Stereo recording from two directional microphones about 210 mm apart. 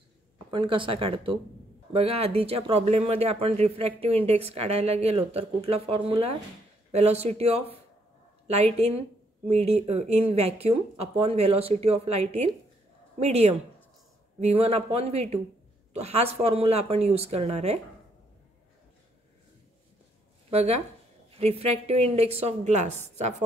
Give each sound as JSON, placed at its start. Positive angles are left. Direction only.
{"t": 0.5, "sound": "speech", "side_deg": -25}
{"t": 20.4, "sound": "speech", "side_deg": -30}